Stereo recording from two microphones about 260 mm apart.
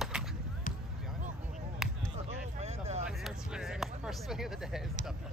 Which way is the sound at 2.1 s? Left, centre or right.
Right.